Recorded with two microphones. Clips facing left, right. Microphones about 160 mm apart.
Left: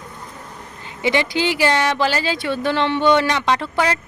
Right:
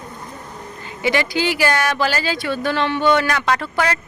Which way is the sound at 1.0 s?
20° left (ahead or behind).